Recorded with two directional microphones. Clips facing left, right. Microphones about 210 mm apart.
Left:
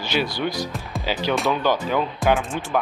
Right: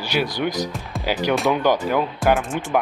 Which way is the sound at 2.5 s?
15° right (ahead or behind).